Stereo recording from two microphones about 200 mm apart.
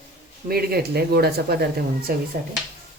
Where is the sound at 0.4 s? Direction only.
50° right (ahead or behind).